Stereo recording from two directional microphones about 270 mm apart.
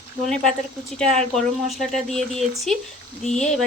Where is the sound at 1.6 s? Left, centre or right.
Centre.